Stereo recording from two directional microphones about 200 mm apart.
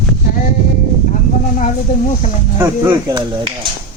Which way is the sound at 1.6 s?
35° left (ahead or behind).